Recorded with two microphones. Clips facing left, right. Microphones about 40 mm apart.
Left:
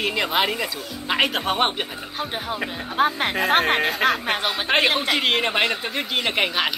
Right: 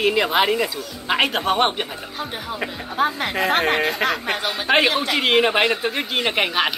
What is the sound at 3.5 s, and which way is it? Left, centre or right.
Speech, centre.